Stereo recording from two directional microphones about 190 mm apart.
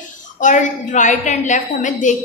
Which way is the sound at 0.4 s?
40° left (ahead or behind).